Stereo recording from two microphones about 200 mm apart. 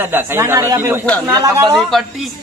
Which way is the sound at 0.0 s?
10° right (ahead or behind).